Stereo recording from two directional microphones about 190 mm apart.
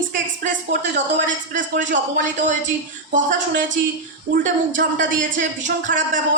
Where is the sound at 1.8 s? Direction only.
40° right (ahead or behind).